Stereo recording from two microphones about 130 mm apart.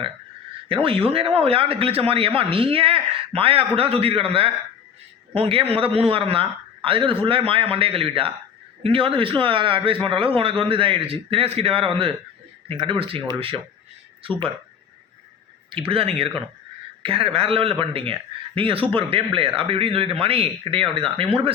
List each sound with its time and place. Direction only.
0.7 s speech: 45° right (ahead or behind)
15.9 s speech: 45° right (ahead or behind)